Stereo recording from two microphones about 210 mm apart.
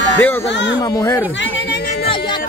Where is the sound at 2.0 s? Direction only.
25° left (ahead or behind).